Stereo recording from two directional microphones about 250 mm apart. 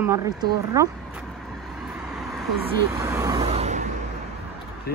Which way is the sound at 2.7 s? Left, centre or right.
Centre.